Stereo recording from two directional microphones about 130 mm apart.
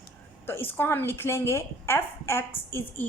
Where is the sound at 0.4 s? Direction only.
15° left (ahead or behind).